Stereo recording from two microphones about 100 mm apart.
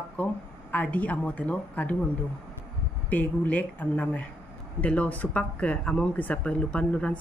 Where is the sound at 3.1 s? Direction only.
15° left (ahead or behind).